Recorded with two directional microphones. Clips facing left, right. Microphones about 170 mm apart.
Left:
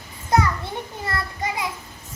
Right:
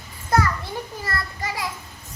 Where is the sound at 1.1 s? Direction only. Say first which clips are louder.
Left 5 dB; 20° left (ahead or behind).